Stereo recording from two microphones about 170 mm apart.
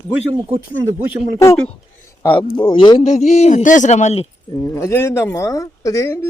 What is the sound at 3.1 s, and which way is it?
A man's voice, 40° left (ahead or behind).